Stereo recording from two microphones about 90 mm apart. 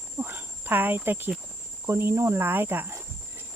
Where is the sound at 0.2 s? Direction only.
20° right (ahead or behind).